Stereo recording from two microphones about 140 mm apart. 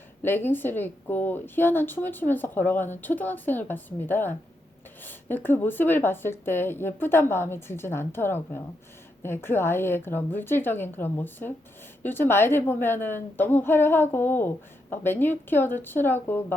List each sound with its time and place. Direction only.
0.2 s a woman's voice: 15° left (ahead or behind)